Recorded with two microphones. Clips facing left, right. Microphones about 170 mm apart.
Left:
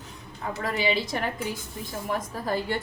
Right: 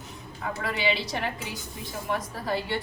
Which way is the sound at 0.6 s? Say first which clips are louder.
Left 2 dB; 45° left (ahead or behind).